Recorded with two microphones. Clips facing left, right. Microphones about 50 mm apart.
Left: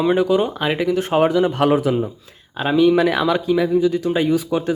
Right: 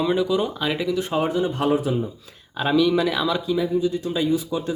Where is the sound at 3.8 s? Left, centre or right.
Left.